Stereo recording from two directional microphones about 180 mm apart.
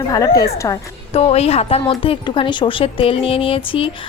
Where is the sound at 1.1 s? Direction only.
35° left (ahead or behind).